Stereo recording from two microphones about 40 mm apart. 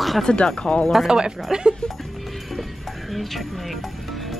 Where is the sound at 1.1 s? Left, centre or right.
Centre.